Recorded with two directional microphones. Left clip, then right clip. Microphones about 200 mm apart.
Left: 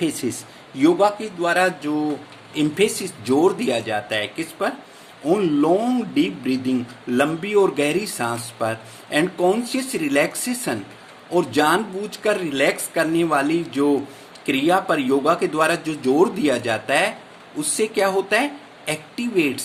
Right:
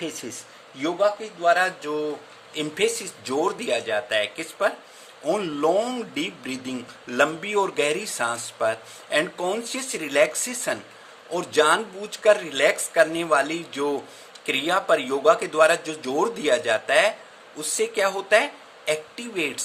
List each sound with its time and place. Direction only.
0.0 s speech: 10° right (ahead or behind)